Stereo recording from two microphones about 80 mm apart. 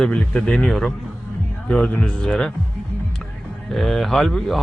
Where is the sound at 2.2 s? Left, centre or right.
Centre.